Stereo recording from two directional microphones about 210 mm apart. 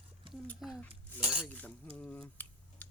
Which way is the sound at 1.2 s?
5° right (ahead or behind).